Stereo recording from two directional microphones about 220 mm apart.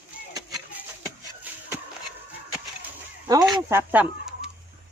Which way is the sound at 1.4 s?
10° right (ahead or behind).